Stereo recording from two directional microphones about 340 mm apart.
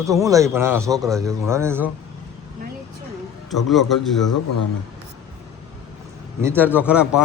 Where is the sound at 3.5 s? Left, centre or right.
Centre.